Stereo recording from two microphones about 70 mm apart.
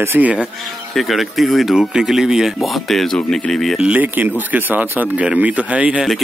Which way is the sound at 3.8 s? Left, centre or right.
Right.